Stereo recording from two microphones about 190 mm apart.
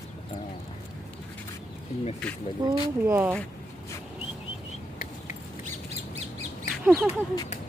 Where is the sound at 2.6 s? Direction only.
20° right (ahead or behind).